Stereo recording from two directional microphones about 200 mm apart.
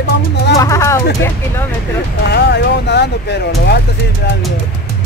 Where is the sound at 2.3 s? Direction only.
55° left (ahead or behind).